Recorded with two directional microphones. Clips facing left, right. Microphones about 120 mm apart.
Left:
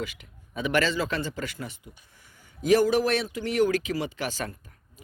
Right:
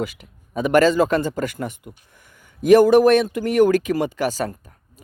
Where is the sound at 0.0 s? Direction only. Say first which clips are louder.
Right 8 dB; 40° right (ahead or behind).